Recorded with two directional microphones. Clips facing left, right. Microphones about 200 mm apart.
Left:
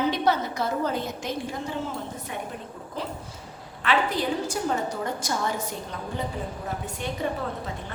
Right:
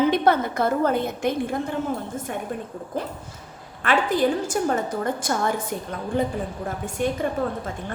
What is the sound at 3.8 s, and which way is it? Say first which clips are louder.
A woman's voice: right 4 dB; 50° right (ahead or behind).